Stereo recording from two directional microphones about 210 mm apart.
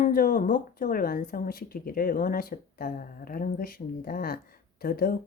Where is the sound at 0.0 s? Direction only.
40° left (ahead or behind).